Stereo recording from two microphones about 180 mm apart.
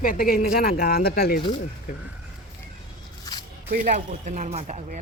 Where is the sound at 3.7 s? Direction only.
45° right (ahead or behind).